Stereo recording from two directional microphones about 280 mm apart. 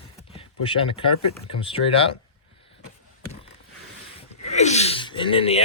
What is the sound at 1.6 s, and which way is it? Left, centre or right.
Speech, centre.